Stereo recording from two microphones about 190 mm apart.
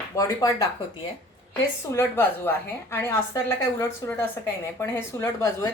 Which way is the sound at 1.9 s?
10° left (ahead or behind).